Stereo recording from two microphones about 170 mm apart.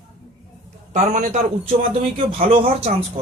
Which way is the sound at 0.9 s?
45° right (ahead or behind).